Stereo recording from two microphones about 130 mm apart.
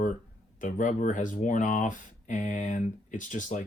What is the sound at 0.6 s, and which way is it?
Speech, 85° left.